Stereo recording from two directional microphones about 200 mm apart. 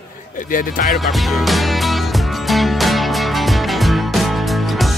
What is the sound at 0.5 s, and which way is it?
Speech, 40° left (ahead or behind).